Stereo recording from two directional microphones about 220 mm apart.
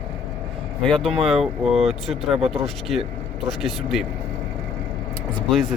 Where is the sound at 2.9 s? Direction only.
Centre (ahead or behind).